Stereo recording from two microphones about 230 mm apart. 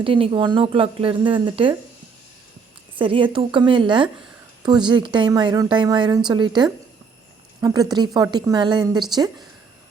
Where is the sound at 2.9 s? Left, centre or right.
Right.